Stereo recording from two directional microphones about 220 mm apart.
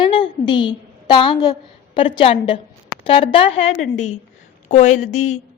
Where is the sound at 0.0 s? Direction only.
20° left (ahead or behind).